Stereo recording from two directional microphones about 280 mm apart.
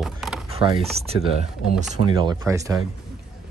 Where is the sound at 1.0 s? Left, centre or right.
Right.